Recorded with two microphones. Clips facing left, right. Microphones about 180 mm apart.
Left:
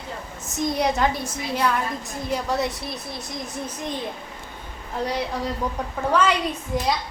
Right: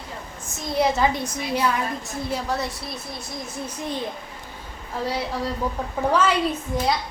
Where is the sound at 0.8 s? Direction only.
5° right (ahead or behind).